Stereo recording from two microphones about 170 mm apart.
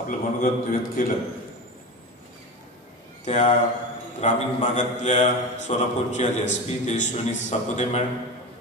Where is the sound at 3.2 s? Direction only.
40° left (ahead or behind).